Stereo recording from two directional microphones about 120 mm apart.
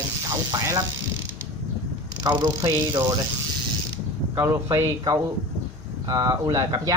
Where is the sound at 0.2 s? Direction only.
30° right (ahead or behind).